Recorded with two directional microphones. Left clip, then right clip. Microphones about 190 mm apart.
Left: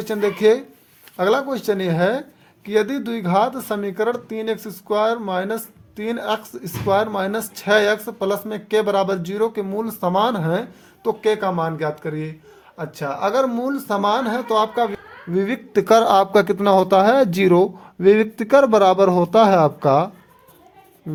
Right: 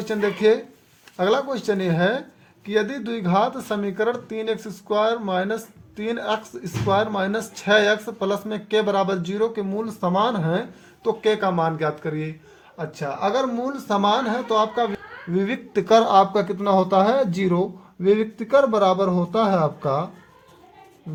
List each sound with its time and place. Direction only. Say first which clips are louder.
0.0 s speech: left 3 dB; 25° left (ahead or behind)
12.7 s speech: left 2 dB; 25° left (ahead or behind); by 20.1 s 60° left (ahead or behind)